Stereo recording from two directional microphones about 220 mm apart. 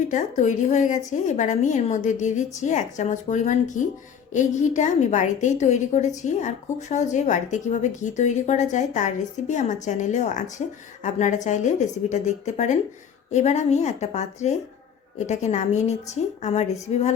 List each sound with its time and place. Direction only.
0.1 s a woman's voice: 35° left (ahead or behind)